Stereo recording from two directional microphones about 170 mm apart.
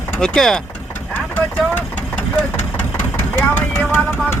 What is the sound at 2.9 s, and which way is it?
Vehicle, 15° left (ahead or behind).